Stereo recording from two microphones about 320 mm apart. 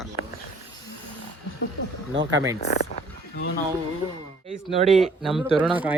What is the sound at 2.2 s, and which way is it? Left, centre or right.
Speech, centre.